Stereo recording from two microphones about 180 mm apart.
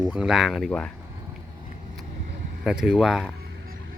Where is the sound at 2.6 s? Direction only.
5° right (ahead or behind).